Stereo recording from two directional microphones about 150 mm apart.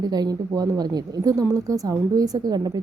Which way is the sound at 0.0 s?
25° right (ahead or behind).